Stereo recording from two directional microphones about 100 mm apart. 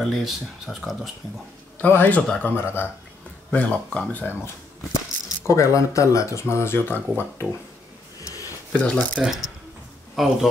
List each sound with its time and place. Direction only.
0.0 s speech: centre (ahead or behind)
1.8 s speech: 20° left (ahead or behind)
5.5 s speech: 30° left (ahead or behind)
8.7 s speech: 15° left (ahead or behind)
9.2 s speech: 5° right (ahead or behind)